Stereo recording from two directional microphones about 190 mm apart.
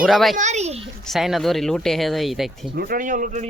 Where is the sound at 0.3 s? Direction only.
35° right (ahead or behind).